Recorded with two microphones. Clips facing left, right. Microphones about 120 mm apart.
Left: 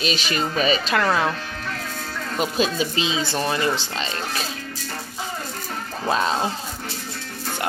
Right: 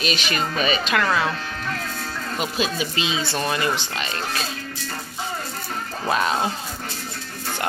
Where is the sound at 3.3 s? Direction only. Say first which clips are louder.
Left 1 dB; 20° left (ahead or behind).